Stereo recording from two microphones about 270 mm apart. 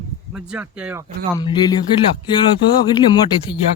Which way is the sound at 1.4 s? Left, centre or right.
Centre.